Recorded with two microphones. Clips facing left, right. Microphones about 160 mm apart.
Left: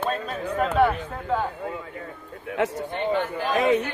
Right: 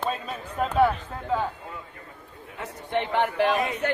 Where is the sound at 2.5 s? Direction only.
85° left.